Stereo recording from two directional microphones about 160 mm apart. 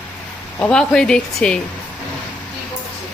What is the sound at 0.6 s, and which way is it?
A woman's voice, 5° left (ahead or behind).